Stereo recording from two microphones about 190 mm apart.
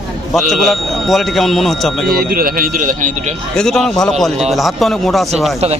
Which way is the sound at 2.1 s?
50° right (ahead or behind).